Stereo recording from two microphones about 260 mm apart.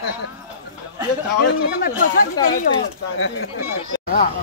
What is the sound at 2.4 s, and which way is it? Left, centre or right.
Speech, centre.